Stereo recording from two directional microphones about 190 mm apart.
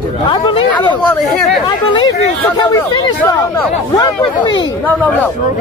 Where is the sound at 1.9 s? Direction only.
20° left (ahead or behind).